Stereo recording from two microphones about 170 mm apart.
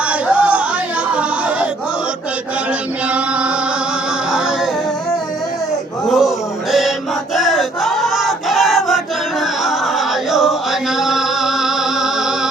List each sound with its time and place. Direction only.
0.1 s music: 5° right (ahead or behind)
3.1 s music: 5° right (ahead or behind)
6.1 s male singing: centre (ahead or behind)
7.3 s a sound: centre (ahead or behind)
10.3 s music: centre (ahead or behind)